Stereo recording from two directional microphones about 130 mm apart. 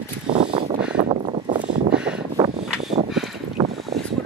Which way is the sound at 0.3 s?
40° right (ahead or behind).